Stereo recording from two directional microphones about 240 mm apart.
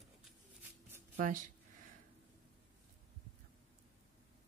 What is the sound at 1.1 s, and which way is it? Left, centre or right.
Speech, right.